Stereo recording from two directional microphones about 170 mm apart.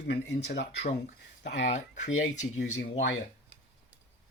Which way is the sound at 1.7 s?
45° left (ahead or behind).